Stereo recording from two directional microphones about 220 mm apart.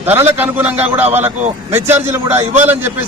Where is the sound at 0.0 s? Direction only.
10° right (ahead or behind).